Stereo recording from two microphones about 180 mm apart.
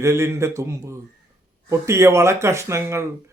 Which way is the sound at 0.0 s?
15° right (ahead or behind).